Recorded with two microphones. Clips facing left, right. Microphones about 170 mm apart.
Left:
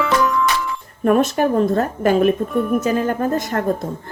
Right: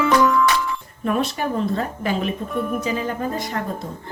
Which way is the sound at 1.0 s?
50° left (ahead or behind).